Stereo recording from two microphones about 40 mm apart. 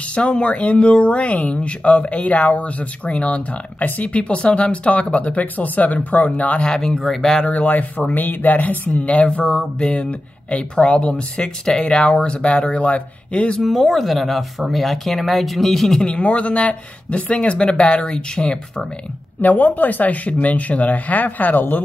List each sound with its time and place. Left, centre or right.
0.1 s speech: left
6.6 s speech: centre
7.0 s speech: centre
8.1 s speech: left
13.6 s speech: centre
16.0 s speech: left
18.3 s speech: left
19.4 s speech: left